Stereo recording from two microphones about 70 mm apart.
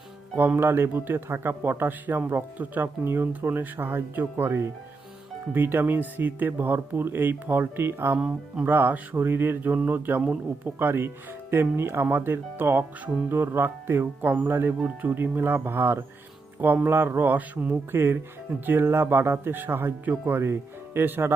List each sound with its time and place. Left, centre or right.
0.3 s a man's voice: right